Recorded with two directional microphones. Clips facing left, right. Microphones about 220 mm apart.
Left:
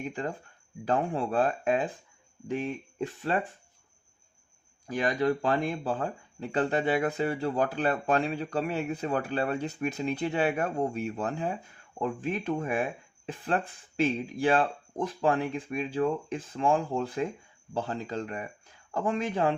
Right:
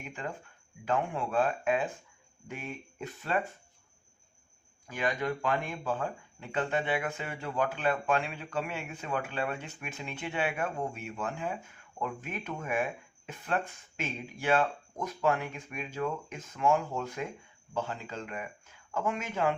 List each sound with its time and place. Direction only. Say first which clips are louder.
0.0 s speech: left 6 dB; 35° left (ahead or behind)
4.9 s speech: left 5 dB; 35° left (ahead or behind)